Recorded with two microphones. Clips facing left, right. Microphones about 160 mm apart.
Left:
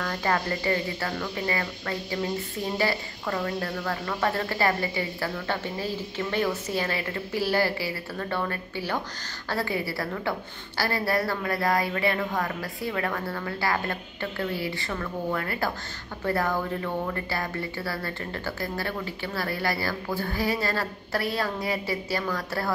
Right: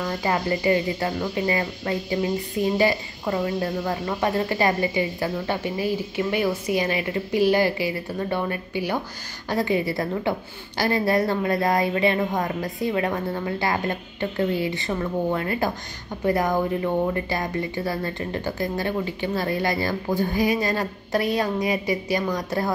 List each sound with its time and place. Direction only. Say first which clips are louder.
0.0 s a woman's voice: right 3 dB; 15° right (ahead or behind)